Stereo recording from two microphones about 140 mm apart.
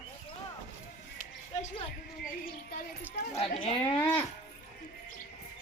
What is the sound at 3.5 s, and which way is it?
Speech, 50° left (ahead or behind).